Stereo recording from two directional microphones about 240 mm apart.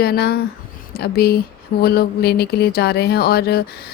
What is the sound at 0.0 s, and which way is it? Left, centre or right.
A woman's voice, left.